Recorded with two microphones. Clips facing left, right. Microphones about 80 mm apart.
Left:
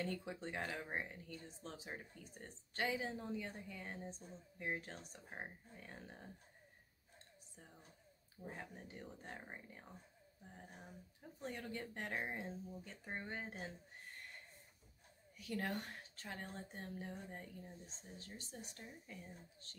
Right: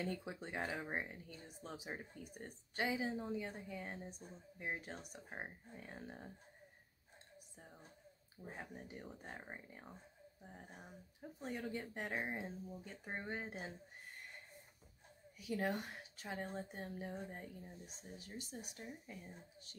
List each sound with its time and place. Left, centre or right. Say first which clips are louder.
0.0 s speech: even; centre
8.5 s speech: right 1 dB; centre
15.3 s speech: right 3 dB; centre